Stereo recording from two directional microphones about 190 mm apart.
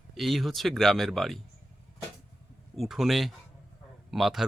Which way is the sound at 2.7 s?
Centre (ahead or behind).